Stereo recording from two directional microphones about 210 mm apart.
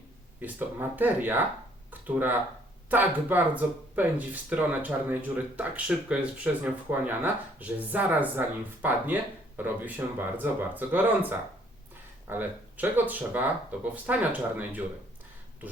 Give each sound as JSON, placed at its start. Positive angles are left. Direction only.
{"t": 0.3, "sound": "speech", "side_deg": -10}